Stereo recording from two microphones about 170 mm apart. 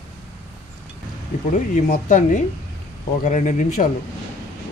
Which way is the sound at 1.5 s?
45° left (ahead or behind).